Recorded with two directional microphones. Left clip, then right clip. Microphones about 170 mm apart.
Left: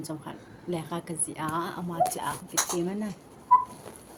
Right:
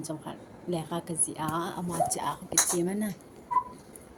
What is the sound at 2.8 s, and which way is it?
Speech, 35° right (ahead or behind).